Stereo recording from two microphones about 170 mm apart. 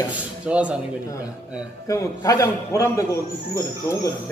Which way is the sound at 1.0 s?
20° left (ahead or behind).